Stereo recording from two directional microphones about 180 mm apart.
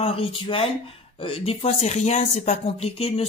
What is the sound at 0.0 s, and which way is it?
A man's voice, 30° left (ahead or behind).